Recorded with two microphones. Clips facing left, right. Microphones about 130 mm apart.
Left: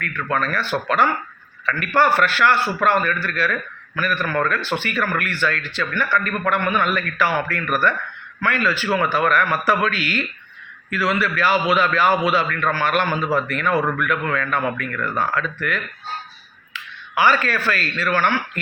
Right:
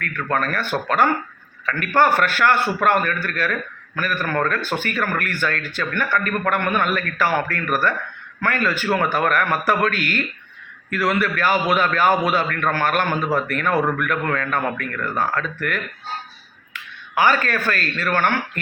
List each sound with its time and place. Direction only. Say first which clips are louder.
0.0 s speech: even; 50° right (ahead or behind)